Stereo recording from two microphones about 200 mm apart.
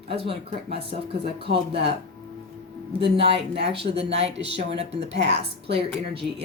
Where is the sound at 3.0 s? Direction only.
30° right (ahead or behind).